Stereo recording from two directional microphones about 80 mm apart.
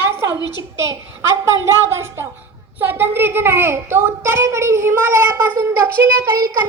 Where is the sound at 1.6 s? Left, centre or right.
Right.